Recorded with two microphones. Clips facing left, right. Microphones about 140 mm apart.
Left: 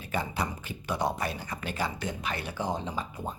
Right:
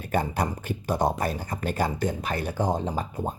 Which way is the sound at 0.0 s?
50° right (ahead or behind).